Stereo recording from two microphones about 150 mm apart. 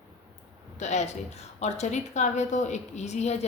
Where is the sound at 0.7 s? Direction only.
50° left (ahead or behind).